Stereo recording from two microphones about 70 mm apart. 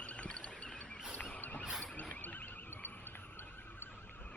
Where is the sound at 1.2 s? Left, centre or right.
Left.